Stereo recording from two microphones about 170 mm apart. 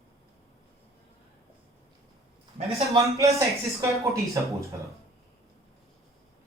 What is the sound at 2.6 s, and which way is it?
Speech, 35° right (ahead or behind).